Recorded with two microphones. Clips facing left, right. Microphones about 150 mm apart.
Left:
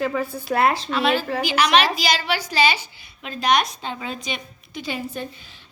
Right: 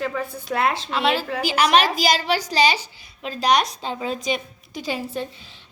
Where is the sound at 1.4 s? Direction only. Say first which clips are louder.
Right 2 dB; 40° right (ahead or behind).